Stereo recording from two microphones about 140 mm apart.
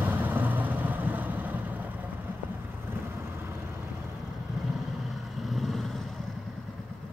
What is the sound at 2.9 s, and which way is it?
Vehicle, 15° right (ahead or behind).